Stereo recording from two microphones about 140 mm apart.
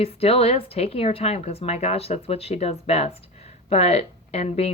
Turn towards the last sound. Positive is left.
turn(degrees=45)  # may be behind; listen again after turning